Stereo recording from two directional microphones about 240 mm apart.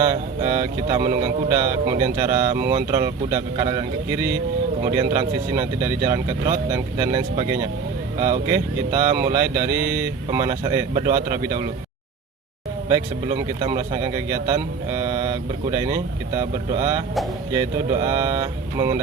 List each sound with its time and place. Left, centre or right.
0.1 s speech: centre
12.9 s speech: centre